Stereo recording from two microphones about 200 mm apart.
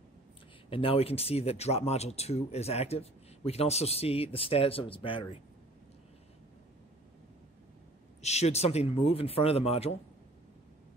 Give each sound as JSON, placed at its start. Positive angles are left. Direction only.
{"t": 0.7, "sound": "speech", "side_deg": 25}
{"t": 8.2, "sound": "speech", "side_deg": 35}